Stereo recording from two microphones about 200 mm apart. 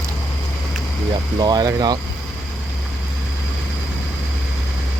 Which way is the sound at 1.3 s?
20° right (ahead or behind).